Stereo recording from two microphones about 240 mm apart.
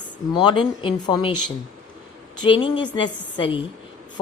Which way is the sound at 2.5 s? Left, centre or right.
Centre.